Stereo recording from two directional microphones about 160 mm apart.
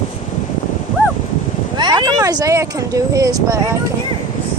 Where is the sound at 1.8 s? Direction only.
25° right (ahead or behind).